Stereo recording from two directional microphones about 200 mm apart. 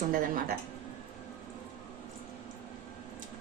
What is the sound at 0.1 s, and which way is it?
Speech, 45° right (ahead or behind).